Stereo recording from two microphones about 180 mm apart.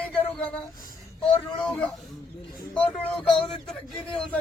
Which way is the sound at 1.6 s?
5° left (ahead or behind).